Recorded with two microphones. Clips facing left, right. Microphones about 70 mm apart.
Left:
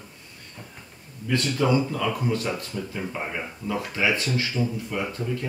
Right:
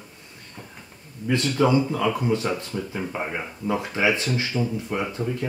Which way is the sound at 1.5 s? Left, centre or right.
Centre.